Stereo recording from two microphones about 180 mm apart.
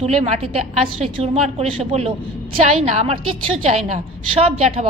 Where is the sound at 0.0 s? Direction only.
35° right (ahead or behind).